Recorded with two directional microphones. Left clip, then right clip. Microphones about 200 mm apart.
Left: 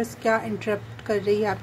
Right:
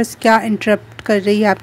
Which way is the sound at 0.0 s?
45° right (ahead or behind).